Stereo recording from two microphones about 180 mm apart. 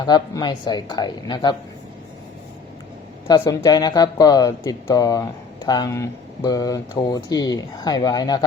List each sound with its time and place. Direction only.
0.0 s speech: 25° left (ahead or behind)
3.2 s speech: 20° left (ahead or behind)